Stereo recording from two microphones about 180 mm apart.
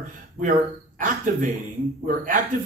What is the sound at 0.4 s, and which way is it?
A man's voice, 50° right (ahead or behind).